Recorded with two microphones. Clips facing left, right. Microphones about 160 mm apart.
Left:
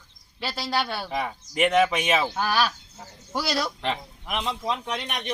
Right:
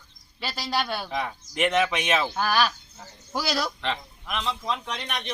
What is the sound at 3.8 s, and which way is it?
Speech, 10° left (ahead or behind).